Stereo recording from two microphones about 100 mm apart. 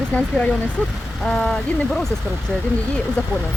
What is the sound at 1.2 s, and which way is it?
Speech, 5° left (ahead or behind).